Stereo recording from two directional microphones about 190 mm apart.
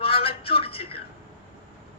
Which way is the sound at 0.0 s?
30° left (ahead or behind).